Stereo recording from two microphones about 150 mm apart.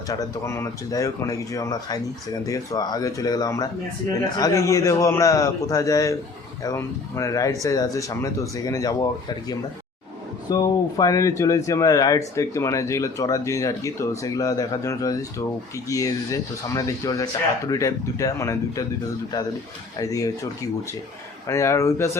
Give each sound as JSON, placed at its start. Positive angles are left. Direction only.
{"t": 0.1, "sound": "speech", "side_deg": 20}
{"t": 10.5, "sound": "speech", "side_deg": 25}
{"t": 20.0, "sound": "speech", "side_deg": 25}